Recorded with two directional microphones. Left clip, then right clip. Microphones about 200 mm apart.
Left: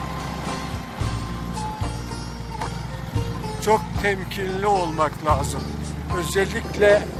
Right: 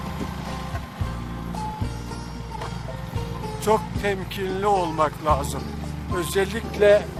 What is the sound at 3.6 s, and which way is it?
Speech, 20° right (ahead or behind).